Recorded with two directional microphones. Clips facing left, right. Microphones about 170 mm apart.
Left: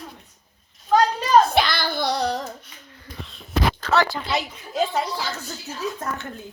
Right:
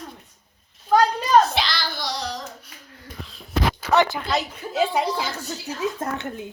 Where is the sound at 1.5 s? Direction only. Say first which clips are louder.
Left 5 dB; 55° left (ahead or behind).